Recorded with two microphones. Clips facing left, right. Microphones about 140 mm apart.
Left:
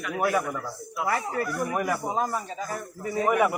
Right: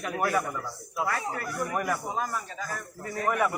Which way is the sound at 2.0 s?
25° left (ahead or behind).